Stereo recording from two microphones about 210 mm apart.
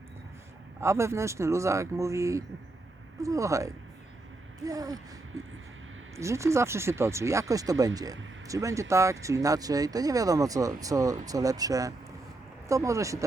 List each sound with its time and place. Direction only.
0.8 s speech: 15° right (ahead or behind)
6.1 s speech: 15° right (ahead or behind)